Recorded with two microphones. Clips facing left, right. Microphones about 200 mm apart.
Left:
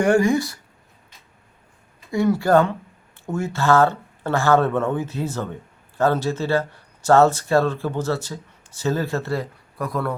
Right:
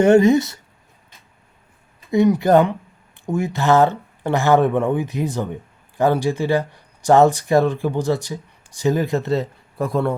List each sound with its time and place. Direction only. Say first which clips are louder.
0.0 s speech: right 5 dB; 25° right (ahead or behind)
2.0 s speech: right 4 dB; 20° right (ahead or behind)